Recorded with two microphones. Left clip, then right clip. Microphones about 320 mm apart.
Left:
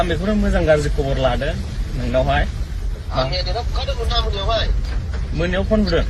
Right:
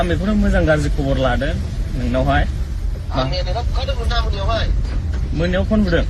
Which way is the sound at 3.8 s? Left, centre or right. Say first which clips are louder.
Left 2 dB; centre.